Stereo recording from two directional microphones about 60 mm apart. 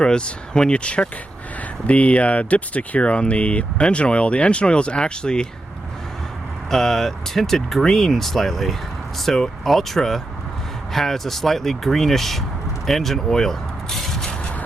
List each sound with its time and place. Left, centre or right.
0.0 s speech: centre
6.7 s speech: centre
12.8 s a sound: centre